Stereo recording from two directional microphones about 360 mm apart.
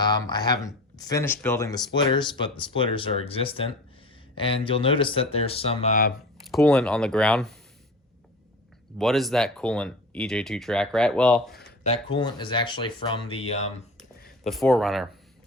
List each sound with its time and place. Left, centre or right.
0.0 s speech: centre
6.4 s speech: centre
9.0 s speech: centre
11.6 s speech: centre
14.4 s speech: centre